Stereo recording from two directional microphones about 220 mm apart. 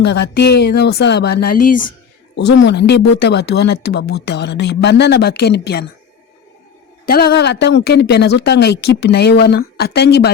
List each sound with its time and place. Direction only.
0.0 s speech: 50° left (ahead or behind)
2.3 s speech: 50° left (ahead or behind)
7.0 s speech: 45° left (ahead or behind)